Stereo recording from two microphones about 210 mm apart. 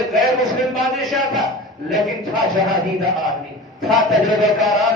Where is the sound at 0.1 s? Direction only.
Centre (ahead or behind).